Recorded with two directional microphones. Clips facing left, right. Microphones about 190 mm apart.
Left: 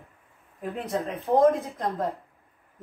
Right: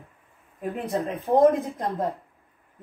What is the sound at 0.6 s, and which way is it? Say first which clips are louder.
Speech: right 2 dB; 15° right (ahead or behind).